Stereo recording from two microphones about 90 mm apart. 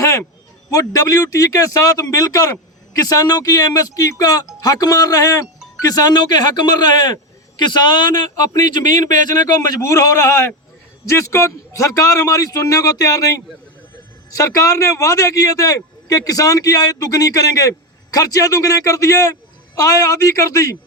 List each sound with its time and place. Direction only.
0.7 s a man's voice: 40° left (ahead or behind)